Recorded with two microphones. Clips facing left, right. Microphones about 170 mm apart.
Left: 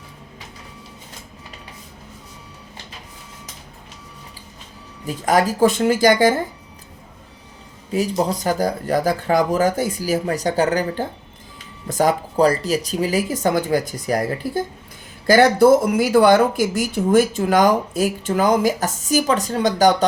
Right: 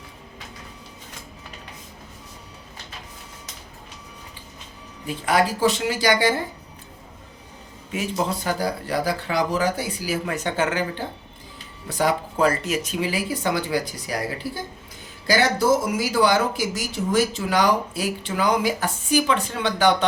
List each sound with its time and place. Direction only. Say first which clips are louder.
5.0 s speech: left 3 dB; 40° left (ahead or behind)
7.9 s speech: left 5 dB; 40° left (ahead or behind)